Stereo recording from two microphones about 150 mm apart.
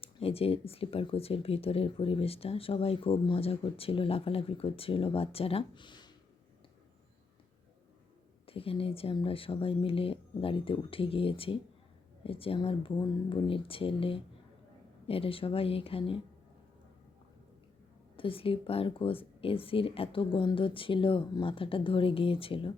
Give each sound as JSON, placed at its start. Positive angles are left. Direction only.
{"t": 0.0, "sound": "speech", "side_deg": 40}
{"t": 8.4, "sound": "speech", "side_deg": 40}
{"t": 18.2, "sound": "speech", "side_deg": 35}